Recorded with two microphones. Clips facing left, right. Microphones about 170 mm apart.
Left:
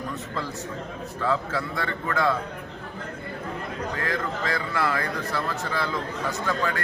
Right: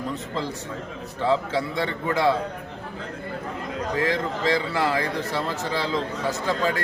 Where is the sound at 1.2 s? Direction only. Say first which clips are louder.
Right 4 dB; 25° right (ahead or behind).